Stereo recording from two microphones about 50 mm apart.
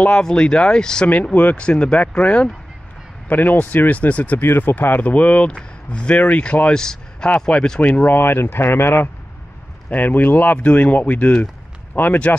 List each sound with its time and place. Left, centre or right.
0.0 s speech: centre
1.0 s speech: left
1.6 s speech: left
3.3 s speech: left
4.4 s speech: left
5.1 s speech: left
6.8 s speech: centre
7.2 s speech: left
7.8 s speech: left
8.2 s speech: left
9.8 s speech: left